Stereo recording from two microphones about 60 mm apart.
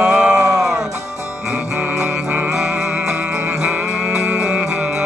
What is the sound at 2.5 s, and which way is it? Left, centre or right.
Music, centre.